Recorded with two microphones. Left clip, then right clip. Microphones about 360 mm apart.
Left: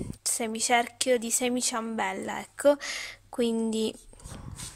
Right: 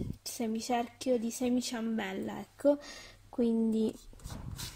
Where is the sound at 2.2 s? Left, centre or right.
Left.